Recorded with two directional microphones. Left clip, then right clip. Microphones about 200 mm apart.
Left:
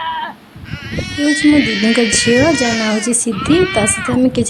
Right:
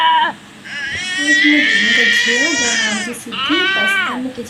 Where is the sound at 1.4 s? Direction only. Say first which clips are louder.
Even; 35° left (ahead or behind).